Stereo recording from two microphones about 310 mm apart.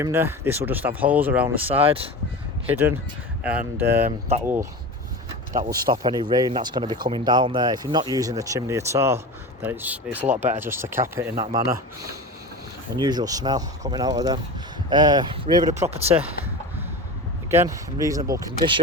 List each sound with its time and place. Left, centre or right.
0.0 s speech: centre
1.8 s speech: centre
2.6 s speech: centre
5.8 s speech: centre
13.0 s speech: centre
17.5 s speech: centre